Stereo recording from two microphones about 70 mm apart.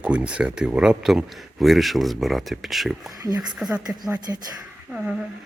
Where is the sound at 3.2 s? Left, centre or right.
Right.